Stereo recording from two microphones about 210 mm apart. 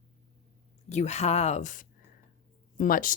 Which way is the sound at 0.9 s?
30° left (ahead or behind).